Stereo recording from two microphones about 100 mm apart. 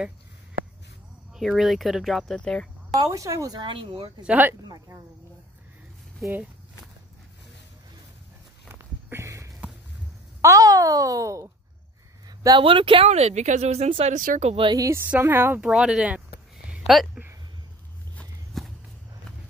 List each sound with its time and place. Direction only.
1.3 s speech: 5° right (ahead or behind)
3.1 s speech: 30° right (ahead or behind)
3.6 s speech: 60° right (ahead or behind)
4.2 s speech: 15° right (ahead or behind)
4.6 s speech: 40° right (ahead or behind)
8.6 s a sound: 30° right (ahead or behind)
10.4 s speech: 35° right (ahead or behind)
12.3 s a sound: 45° right (ahead or behind)
12.6 s speech: 60° right (ahead or behind); by 14.7 s 80° right
14.7 s speech: 30° right (ahead or behind)
15.0 s speech: 20° right (ahead or behind)
15.6 s speech: 5° right (ahead or behind)
18.6 s walk: centre (ahead or behind)